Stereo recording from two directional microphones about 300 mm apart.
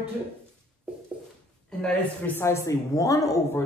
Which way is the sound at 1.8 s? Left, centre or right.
Centre.